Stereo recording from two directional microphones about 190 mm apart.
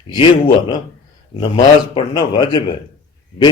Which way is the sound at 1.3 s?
25° left (ahead or behind).